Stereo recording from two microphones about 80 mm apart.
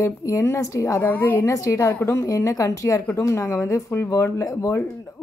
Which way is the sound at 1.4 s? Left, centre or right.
Left.